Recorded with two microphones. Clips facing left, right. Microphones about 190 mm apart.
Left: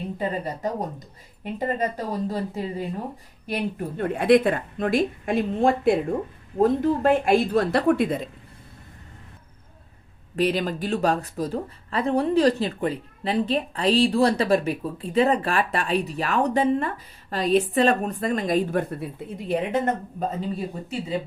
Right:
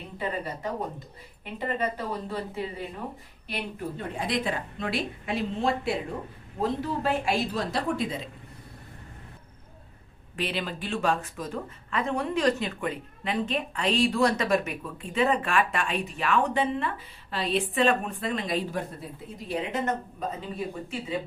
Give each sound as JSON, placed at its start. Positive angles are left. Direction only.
{"t": 0.2, "sound": "speech", "side_deg": 40}
{"t": 3.4, "sound": "a woman's voice", "side_deg": 50}
{"t": 10.3, "sound": "a woman's voice", "side_deg": 40}